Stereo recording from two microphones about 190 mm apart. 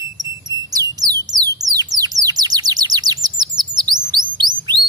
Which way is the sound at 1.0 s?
20° right (ahead or behind).